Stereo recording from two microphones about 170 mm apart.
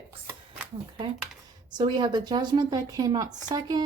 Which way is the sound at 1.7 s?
25° right (ahead or behind).